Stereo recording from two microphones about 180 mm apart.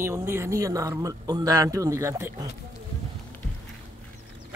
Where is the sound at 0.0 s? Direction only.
15° right (ahead or behind).